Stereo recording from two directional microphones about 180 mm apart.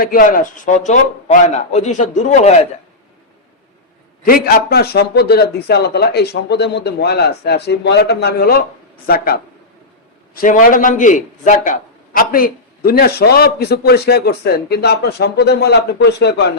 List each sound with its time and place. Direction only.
0.0 s a man's voice: 50° left (ahead or behind)
4.3 s a man's voice: 60° left (ahead or behind)